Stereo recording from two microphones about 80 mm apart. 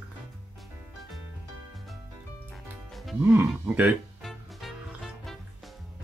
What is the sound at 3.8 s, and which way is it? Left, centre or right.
Music, centre.